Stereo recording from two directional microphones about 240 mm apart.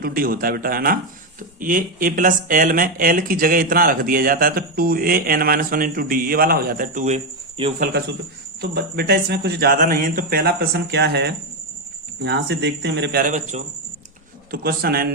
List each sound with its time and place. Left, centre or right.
0.0 s speech: right
8.7 s speech: right